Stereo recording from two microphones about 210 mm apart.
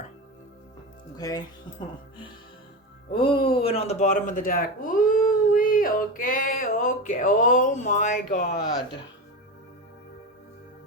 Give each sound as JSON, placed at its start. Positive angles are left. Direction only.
{"t": 1.1, "sound": "speech", "side_deg": 20}
{"t": 3.1, "sound": "speech", "side_deg": 25}
{"t": 8.4, "sound": "speech", "side_deg": 50}